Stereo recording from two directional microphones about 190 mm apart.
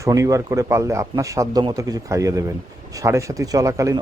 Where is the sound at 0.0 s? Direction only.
15° right (ahead or behind).